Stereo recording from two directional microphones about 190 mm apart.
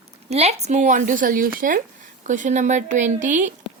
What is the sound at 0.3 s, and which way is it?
A woman's voice, 35° right (ahead or behind).